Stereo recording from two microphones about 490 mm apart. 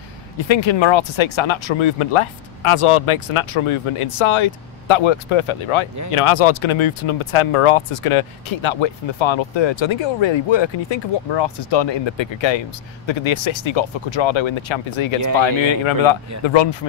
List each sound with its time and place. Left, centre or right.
0.4 s speech: left
6.1 s speech: left